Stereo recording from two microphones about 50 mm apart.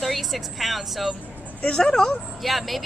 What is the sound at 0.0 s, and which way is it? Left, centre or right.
A woman's voice, centre.